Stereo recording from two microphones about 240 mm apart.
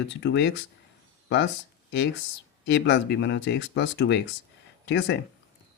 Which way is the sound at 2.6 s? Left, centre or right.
Left.